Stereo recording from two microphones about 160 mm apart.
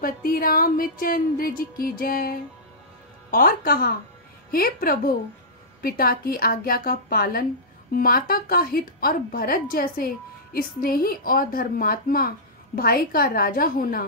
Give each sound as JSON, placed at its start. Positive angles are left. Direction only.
{"t": 0.0, "sound": "a woman's voice", "side_deg": 65}